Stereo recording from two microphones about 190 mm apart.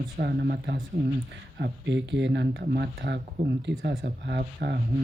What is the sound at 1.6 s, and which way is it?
Speech, 65° right (ahead or behind).